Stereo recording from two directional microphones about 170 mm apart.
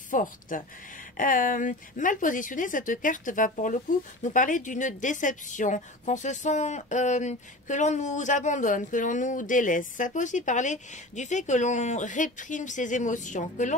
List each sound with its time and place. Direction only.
0.1 s speech: 50° left (ahead or behind)